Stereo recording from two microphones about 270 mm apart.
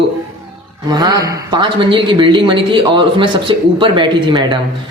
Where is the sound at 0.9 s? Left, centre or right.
Centre.